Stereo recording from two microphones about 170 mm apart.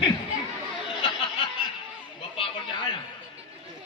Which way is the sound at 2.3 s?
30° left (ahead or behind).